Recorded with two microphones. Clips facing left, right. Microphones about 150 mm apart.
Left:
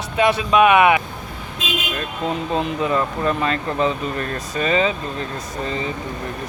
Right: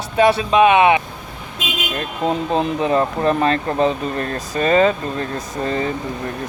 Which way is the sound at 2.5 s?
35° right (ahead or behind).